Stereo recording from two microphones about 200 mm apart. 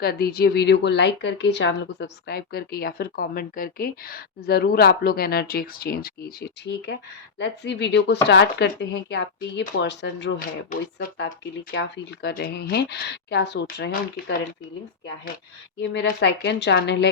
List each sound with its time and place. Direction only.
0.0 s a woman's voice: 50° left (ahead or behind)
15.8 s speech: 65° left (ahead or behind)